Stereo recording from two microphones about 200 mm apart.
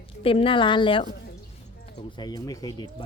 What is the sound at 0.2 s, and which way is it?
Speech, 25° left (ahead or behind).